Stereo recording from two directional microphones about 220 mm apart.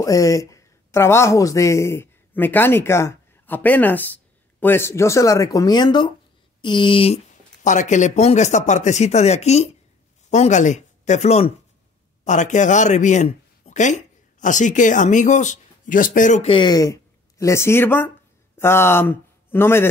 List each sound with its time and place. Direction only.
0.0 s speech: 15° left (ahead or behind)